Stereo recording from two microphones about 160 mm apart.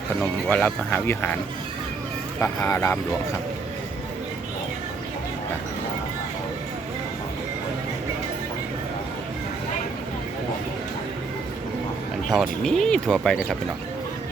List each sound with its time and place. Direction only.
0.2 s speech: 10° left (ahead or behind)
2.4 s speech: 20° left (ahead or behind)
12.3 s speech: centre (ahead or behind)